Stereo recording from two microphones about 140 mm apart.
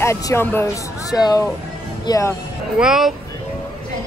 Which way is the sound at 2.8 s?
5° right (ahead or behind).